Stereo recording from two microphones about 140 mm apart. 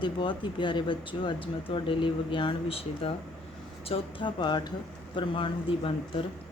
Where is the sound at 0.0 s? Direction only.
35° left (ahead or behind).